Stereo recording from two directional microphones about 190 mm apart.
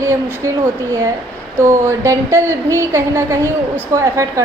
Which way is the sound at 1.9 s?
15° right (ahead or behind).